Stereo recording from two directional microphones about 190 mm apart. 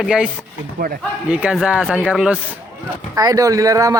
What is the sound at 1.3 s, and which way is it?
Speech, 5° right (ahead or behind).